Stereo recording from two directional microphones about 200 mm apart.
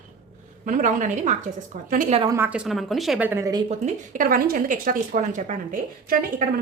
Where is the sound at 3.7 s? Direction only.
40° right (ahead or behind).